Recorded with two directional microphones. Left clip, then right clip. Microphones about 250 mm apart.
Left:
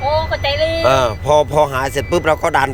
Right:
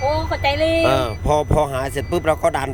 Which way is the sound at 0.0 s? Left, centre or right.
Right.